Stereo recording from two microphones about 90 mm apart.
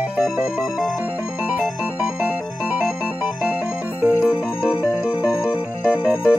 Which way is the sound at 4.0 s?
15° right (ahead or behind).